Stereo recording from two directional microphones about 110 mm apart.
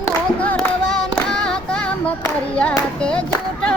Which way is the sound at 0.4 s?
10° left (ahead or behind).